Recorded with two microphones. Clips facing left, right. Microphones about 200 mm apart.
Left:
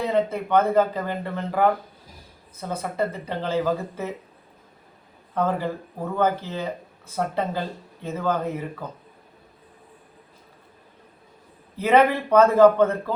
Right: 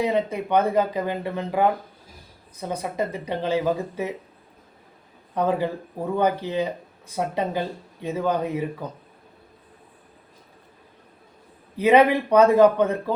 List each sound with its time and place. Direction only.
0.0 s speech: 15° right (ahead or behind)
5.3 s a man's voice: 15° right (ahead or behind)
11.8 s speech: 15° right (ahead or behind)